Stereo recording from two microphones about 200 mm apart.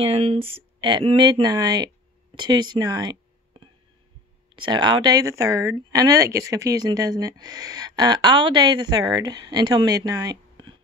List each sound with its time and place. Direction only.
0.0 s speech: 30° right (ahead or behind)
4.6 s speech: 20° right (ahead or behind)